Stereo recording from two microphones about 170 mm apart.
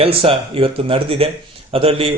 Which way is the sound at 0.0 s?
35° right (ahead or behind).